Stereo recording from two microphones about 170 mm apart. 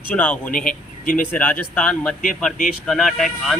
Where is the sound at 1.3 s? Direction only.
10° left (ahead or behind).